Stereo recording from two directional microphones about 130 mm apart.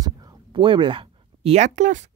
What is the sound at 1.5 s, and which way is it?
Speech, 65° right (ahead or behind).